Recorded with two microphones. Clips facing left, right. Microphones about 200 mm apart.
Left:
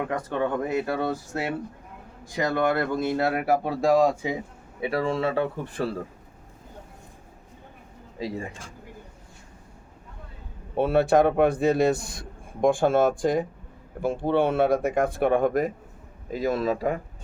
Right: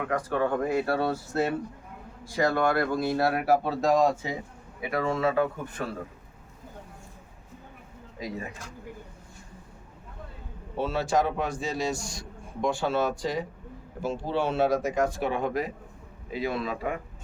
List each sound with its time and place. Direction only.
0.1 s speech: 25° left (ahead or behind)
4.8 s speech: 30° left (ahead or behind)
8.2 s speech: 30° left (ahead or behind)
10.8 s a man's voice: 60° left (ahead or behind); by 17.0 s 40° left (ahead or behind)